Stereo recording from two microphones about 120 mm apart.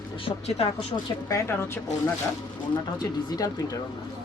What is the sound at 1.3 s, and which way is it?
Speech, 25° left (ahead or behind).